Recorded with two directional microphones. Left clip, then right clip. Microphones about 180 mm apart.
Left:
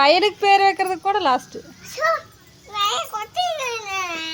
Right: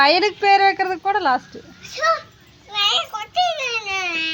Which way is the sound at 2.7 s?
35° left (ahead or behind).